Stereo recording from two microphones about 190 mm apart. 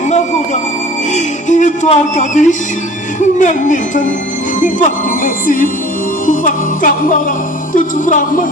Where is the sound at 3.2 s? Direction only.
40° left (ahead or behind).